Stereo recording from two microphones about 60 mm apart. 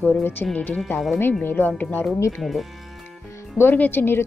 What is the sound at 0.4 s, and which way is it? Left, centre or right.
Speech, centre.